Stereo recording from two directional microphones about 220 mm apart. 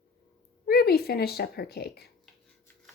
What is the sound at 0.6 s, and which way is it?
Speech, 45° left (ahead or behind).